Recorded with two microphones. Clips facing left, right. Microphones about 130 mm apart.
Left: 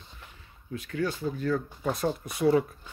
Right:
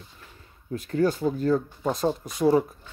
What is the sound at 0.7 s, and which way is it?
Speech, 35° right (ahead or behind).